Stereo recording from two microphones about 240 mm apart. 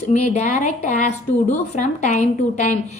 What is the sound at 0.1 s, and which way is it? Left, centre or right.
A woman's voice, left.